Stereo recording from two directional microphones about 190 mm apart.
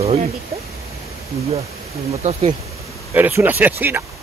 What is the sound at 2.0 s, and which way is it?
Speech, 35° right (ahead or behind).